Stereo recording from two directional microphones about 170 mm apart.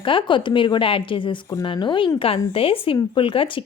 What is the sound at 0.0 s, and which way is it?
A woman's voice, 30° left (ahead or behind).